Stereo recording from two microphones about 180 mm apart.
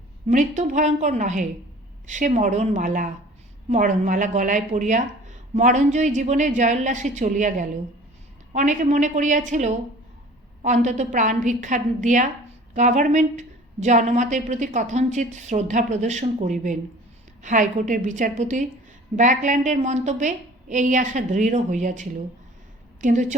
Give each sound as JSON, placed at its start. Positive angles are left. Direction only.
{"t": 0.3, "sound": "a woman's voice", "side_deg": -40}